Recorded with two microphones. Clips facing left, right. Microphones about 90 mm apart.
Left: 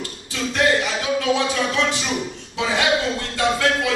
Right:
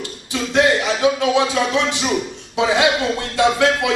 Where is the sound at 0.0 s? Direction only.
20° right (ahead or behind).